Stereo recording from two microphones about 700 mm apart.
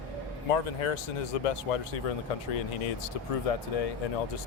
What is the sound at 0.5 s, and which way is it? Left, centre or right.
Speech, left.